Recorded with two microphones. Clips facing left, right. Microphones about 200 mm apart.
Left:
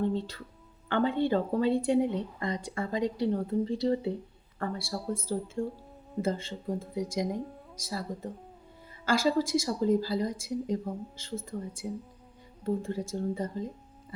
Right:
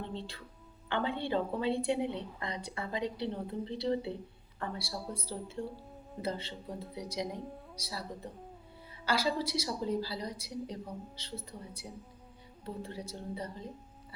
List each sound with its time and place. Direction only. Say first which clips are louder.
0.1 s a woman's voice: left 9 dB; 45° left (ahead or behind)